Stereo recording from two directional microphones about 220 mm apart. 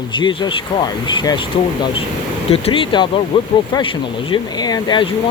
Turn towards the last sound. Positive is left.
turn(degrees=20)  # may be behind; listen again after turning